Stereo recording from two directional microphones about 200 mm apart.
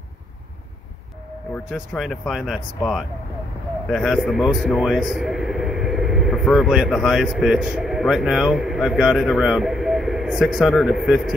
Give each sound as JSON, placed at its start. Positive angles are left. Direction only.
{"t": 1.5, "sound": "speech", "side_deg": 0}